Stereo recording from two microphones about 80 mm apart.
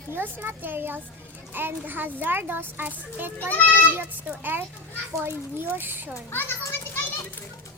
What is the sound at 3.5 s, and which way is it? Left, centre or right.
Speech, left.